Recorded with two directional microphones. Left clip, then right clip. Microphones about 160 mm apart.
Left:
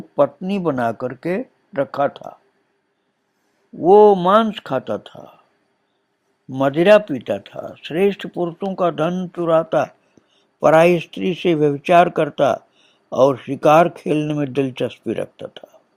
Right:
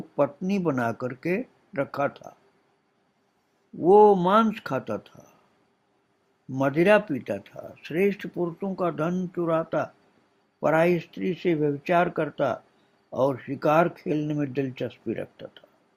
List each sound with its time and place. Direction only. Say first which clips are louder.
0.2 s speech: left 7 dB; 20° left (ahead or behind)
3.8 s speech: left 6 dB; 25° left (ahead or behind)
6.5 s speech: left 8 dB; 25° left (ahead or behind)
9.1 s speech: left 4 dB; 20° left (ahead or behind)
9.4 s speech: left 9 dB; 30° left (ahead or behind)